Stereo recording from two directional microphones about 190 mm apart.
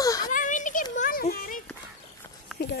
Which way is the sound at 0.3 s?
45° left (ahead or behind).